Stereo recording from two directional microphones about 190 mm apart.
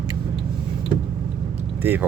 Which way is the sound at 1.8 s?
10° right (ahead or behind).